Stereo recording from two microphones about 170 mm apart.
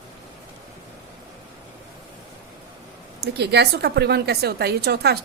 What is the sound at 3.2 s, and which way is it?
A woman's voice, 75° right (ahead or behind).